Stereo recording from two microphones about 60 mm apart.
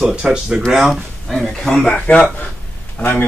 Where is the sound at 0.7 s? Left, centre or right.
Centre.